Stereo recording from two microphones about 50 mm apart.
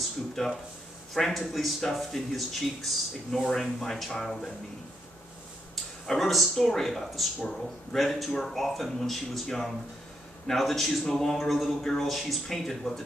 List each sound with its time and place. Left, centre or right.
0.4 s a man's voice: centre
6.0 s a man's voice: centre